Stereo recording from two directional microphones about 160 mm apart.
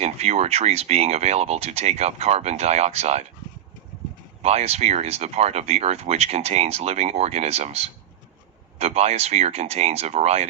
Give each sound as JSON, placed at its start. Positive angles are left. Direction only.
{"t": 0.0, "sound": "speech", "side_deg": -40}
{"t": 4.4, "sound": "speech", "side_deg": -40}